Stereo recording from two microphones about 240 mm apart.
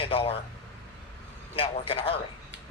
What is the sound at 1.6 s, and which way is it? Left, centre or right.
Speech, left.